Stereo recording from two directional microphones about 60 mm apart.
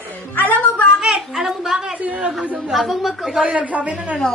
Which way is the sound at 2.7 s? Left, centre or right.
Centre.